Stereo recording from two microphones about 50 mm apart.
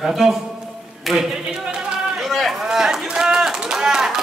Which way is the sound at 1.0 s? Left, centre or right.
Centre.